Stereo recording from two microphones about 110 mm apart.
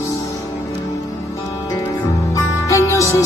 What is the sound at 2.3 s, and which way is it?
Music, 30° left (ahead or behind).